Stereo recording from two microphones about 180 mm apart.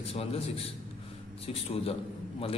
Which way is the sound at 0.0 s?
30° left (ahead or behind).